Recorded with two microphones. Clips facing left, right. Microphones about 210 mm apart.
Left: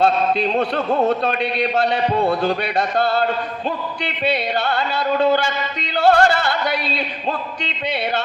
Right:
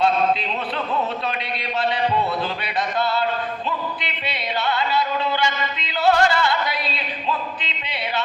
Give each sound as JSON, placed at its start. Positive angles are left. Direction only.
{"t": 0.9, "sound": "music", "side_deg": 45}